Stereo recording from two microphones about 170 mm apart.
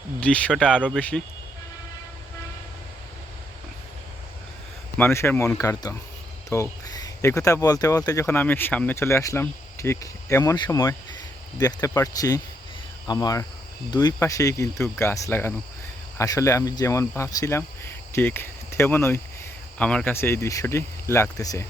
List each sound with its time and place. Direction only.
0.2 s speech: 5° left (ahead or behind)
4.9 s speech: 15° left (ahead or behind)